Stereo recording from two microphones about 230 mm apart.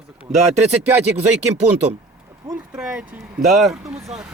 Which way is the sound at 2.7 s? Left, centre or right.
Centre.